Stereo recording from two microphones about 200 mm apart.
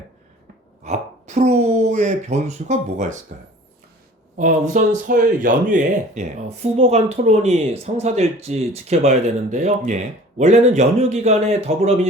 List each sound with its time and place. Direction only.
0.9 s speech: 35° right (ahead or behind)
4.4 s speech: 40° right (ahead or behind)